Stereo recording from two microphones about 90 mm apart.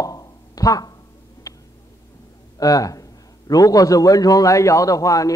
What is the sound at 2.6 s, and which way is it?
Speech, 40° left (ahead or behind).